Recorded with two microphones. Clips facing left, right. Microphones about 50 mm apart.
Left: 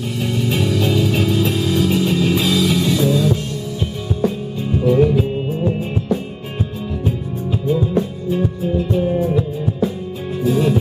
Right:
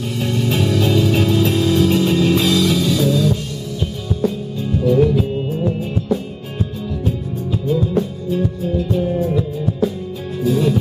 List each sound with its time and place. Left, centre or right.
0.2 s music: centre
4.7 s music: centre
7.6 s music: centre